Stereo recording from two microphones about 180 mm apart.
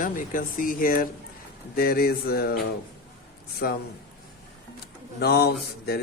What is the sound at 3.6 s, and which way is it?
Speech, 60° left (ahead or behind).